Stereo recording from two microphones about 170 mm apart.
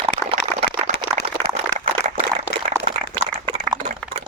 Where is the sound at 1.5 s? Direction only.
45° right (ahead or behind).